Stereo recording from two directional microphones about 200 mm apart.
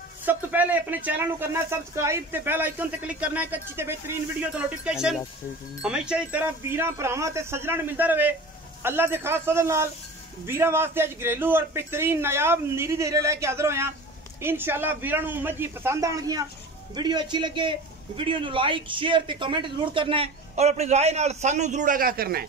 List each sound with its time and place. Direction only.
0.2 s a man's voice: 10° right (ahead or behind); by 22.4 s 50° right (ahead or behind)